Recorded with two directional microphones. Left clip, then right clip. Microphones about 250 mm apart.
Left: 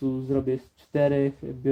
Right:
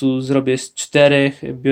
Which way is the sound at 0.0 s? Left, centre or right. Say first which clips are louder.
Right 9 dB; right.